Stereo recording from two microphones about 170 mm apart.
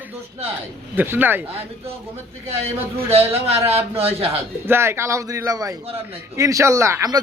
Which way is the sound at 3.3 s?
35° right (ahead or behind).